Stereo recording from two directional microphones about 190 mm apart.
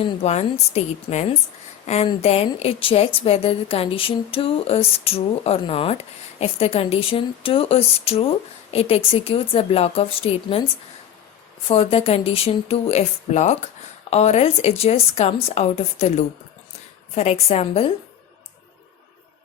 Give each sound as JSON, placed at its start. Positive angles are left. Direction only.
{"t": 0.0, "sound": "a woman's voice", "side_deg": 35}
{"t": 11.7, "sound": "a woman's voice", "side_deg": 30}